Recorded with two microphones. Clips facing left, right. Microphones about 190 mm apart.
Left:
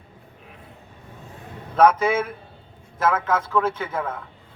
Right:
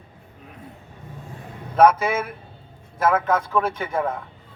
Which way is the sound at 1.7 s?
10° right (ahead or behind).